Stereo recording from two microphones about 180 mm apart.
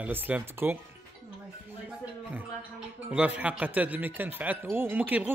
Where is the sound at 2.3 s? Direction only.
5° right (ahead or behind).